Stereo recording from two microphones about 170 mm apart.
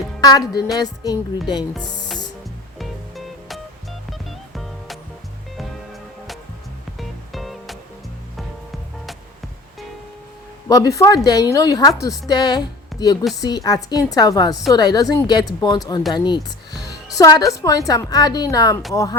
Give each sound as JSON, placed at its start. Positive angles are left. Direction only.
{"t": 0.2, "sound": "a woman's voice", "side_deg": 20}
{"t": 2.7, "sound": "music", "side_deg": 0}
{"t": 7.3, "sound": "music", "side_deg": 0}
{"t": 10.7, "sound": "a woman's voice", "side_deg": 20}
{"t": 16.1, "sound": "music", "side_deg": 25}
{"t": 17.2, "sound": "a woman's voice", "side_deg": 20}